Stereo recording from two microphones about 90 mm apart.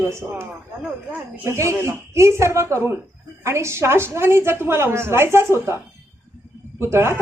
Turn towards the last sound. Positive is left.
turn(degrees=-30)  # may be behind; listen again after turning